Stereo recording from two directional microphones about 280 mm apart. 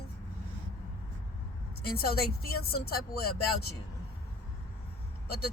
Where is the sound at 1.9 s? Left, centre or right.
Left.